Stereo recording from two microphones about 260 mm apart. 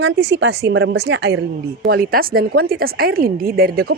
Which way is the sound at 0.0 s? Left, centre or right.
Right.